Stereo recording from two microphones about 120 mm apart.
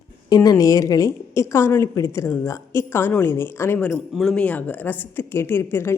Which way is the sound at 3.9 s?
5° left (ahead or behind).